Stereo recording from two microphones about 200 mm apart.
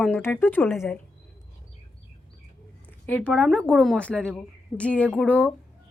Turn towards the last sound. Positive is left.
turn(degrees=5)  # may be behind; listen again after turning